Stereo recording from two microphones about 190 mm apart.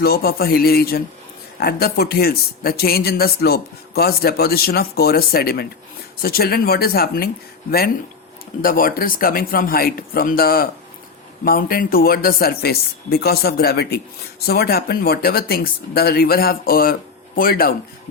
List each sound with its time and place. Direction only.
0.0 s speech: 55° left (ahead or behind)
8.6 s speech: 50° left (ahead or behind)